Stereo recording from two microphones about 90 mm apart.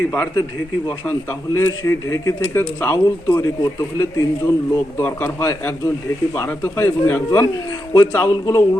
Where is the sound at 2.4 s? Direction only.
20° left (ahead or behind).